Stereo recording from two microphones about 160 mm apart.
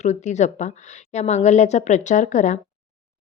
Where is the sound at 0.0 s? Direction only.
45° left (ahead or behind).